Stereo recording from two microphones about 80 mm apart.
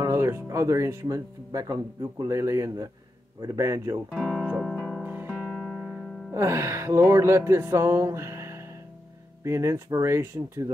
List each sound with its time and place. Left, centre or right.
0.0 s speech: right
2.2 s speech: right
4.1 s speech: centre
4.6 s music: centre
5.0 s music: right
5.5 s music: centre
6.3 s speech: right